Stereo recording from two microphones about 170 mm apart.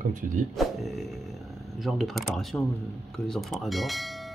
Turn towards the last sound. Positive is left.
turn(degrees=0)  # may be behind; listen again after turning